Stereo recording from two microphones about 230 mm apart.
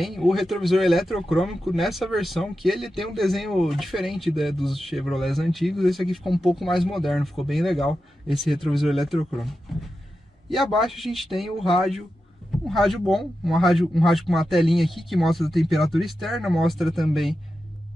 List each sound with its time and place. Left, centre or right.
0.0 s speech: centre